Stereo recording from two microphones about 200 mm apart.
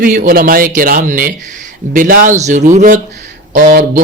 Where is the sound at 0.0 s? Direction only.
45° right (ahead or behind).